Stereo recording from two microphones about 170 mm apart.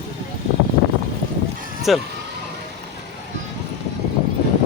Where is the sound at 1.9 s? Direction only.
Centre (ahead or behind).